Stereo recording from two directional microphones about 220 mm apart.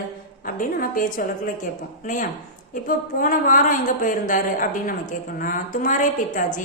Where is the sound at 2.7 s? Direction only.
40° left (ahead or behind).